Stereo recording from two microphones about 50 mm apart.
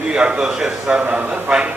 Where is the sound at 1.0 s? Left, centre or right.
Right.